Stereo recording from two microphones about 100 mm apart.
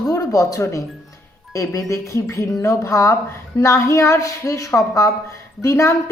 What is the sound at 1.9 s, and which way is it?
A woman's voice, 30° left (ahead or behind).